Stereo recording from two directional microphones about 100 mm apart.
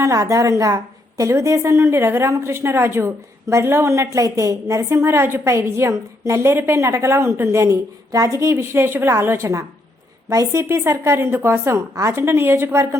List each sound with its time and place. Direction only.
0.0 s a woman's voice: 30° right (ahead or behind)